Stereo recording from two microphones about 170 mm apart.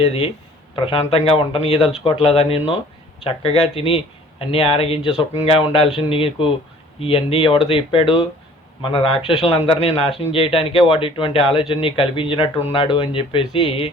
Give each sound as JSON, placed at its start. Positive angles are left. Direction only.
{"t": 0.0, "sound": "a man's voice", "side_deg": 35}